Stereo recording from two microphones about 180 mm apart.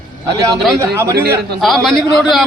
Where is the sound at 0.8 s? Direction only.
15° right (ahead or behind).